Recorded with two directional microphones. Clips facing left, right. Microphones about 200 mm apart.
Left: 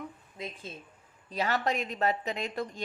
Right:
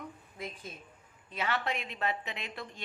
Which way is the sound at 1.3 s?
40° left (ahead or behind).